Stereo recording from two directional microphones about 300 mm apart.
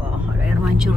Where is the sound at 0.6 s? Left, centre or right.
Centre.